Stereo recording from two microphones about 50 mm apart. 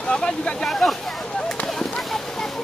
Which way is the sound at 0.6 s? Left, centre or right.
Centre.